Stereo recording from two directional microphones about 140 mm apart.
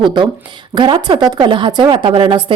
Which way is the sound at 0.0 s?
35° right (ahead or behind).